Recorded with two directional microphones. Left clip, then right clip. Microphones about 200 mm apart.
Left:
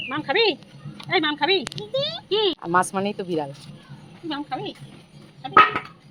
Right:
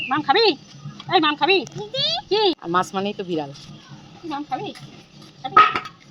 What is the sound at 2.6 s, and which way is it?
Speech, 5° left (ahead or behind).